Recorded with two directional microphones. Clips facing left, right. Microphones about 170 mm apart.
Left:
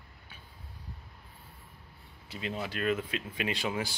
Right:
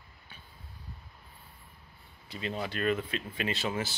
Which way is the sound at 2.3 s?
5° left (ahead or behind).